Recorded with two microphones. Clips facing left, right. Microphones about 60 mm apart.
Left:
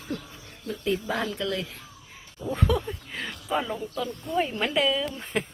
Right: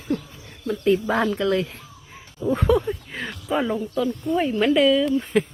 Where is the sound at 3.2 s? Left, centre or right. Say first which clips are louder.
Right 5 dB; centre.